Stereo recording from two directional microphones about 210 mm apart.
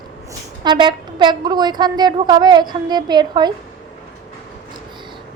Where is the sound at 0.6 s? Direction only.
20° right (ahead or behind).